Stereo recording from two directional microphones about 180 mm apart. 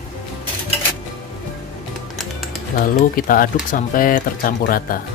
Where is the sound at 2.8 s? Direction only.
50° left (ahead or behind).